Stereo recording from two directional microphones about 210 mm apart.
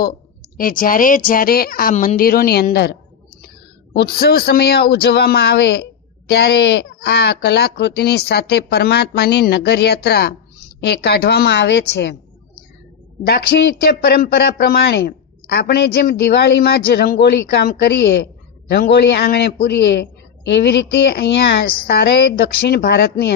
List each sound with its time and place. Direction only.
0.5 s speech: 40° left (ahead or behind)
3.9 s speech: 50° left (ahead or behind)
13.2 s speech: 50° left (ahead or behind)